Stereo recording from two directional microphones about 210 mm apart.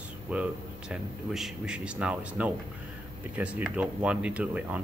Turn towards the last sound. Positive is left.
turn(degrees=-5)  # may be behind; listen again after turning